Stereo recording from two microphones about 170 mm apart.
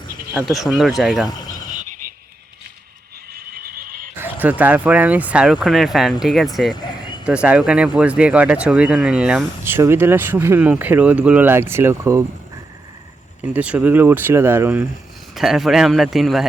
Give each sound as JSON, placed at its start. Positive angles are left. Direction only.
{"t": 0.6, "sound": "a man's voice", "side_deg": -5}
{"t": 3.3, "sound": "frog", "side_deg": -60}
{"t": 4.2, "sound": "speech", "side_deg": -10}
{"t": 13.4, "sound": "speech", "side_deg": -10}
{"t": 15.4, "sound": "a man's voice", "side_deg": 0}